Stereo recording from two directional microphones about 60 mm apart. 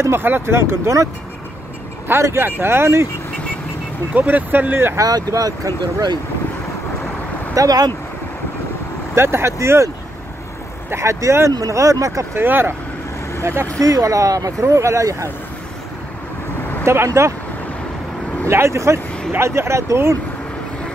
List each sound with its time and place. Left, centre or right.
0.0 s speech: right
2.1 s speech: right
4.1 s speech: right
4.9 s speech: right
7.5 s speech: right
9.1 s speech: right
11.0 s speech: right
12.4 s speech: right
13.7 s speech: right
16.8 s speech: right
18.5 s speech: right